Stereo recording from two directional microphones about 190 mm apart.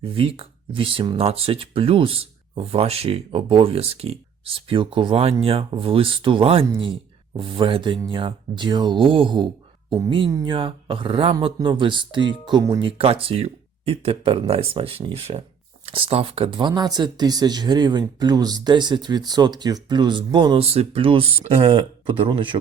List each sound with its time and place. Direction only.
0.0 s speech: 30° right (ahead or behind)